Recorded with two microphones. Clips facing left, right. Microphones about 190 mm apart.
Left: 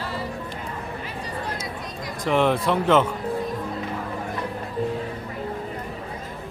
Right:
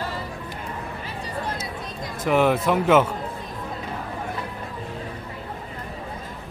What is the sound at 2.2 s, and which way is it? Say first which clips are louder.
Speech: right 1 dB; 5° right (ahead or behind).